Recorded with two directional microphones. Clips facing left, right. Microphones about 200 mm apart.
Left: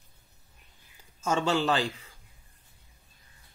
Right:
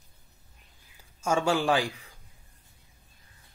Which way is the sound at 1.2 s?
10° right (ahead or behind).